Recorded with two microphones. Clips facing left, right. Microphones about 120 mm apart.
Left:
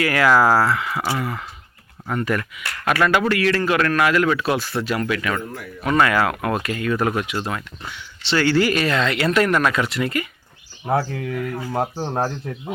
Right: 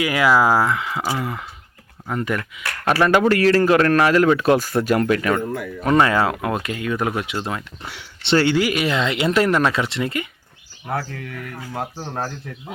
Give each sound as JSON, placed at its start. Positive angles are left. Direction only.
{"t": 0.0, "sound": "speech", "side_deg": -15}
{"t": 2.8, "sound": "a man's voice", "side_deg": -30}
{"t": 5.8, "sound": "speech", "side_deg": -30}
{"t": 7.9, "sound": "speech", "side_deg": -65}
{"t": 8.5, "sound": "speech", "side_deg": -10}
{"t": 10.8, "sound": "speech", "side_deg": 25}